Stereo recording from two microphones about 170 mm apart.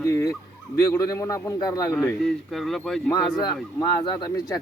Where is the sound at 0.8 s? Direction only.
20° left (ahead or behind).